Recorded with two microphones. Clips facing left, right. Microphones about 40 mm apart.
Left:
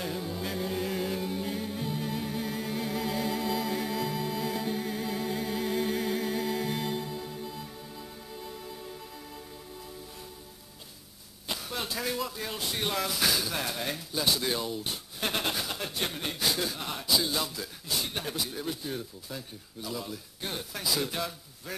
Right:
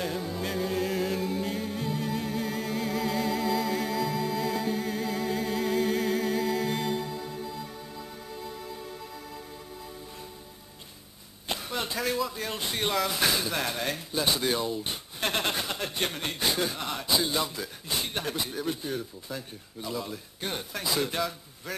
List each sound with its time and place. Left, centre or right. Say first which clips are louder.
0.0 s music: right 2 dB; centre
8.7 s music: right 2 dB; centre
11.4 s a sound: right 3 dB; centre
12.3 s speech: right 2 dB; centre